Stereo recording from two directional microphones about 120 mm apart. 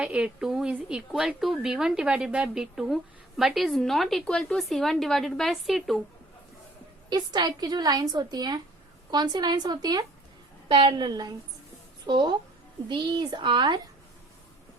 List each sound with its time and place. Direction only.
0.0 s a woman's voice: 10° right (ahead or behind)
7.1 s a woman's voice: 35° right (ahead or behind)
10.7 s a woman's voice: 45° right (ahead or behind)